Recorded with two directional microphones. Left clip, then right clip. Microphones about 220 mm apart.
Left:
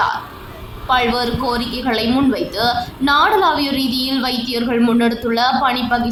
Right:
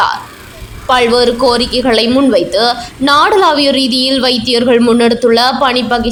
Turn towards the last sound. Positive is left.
turn(degrees=-30)  # may be behind; listen again after turning